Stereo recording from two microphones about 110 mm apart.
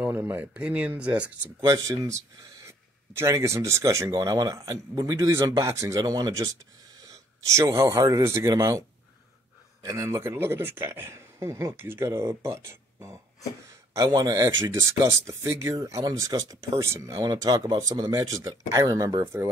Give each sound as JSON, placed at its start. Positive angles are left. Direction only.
{"t": 0.0, "sound": "speech", "side_deg": -15}
{"t": 1.6, "sound": "a man's voice", "side_deg": -30}
{"t": 9.8, "sound": "a man's voice", "side_deg": -25}
{"t": 13.9, "sound": "a man's voice", "side_deg": -35}
{"t": 18.1, "sound": "a man's voice", "side_deg": -25}